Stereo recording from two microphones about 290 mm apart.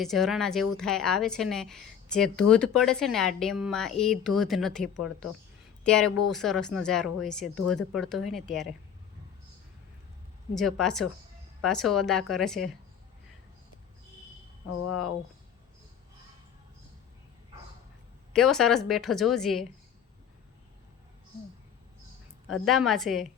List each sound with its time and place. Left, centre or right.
0.0 s a woman's voice: centre
10.5 s a woman's voice: centre
14.8 s speech: left
18.3 s a woman's voice: centre
22.6 s a woman's voice: centre